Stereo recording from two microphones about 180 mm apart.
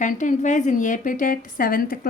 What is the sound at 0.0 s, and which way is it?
A woman's voice, 45° left (ahead or behind).